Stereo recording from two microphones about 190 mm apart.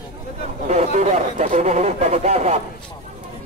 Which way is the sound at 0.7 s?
35° right (ahead or behind).